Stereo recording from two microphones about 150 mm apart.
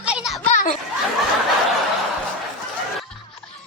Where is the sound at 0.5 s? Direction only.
55° left (ahead or behind).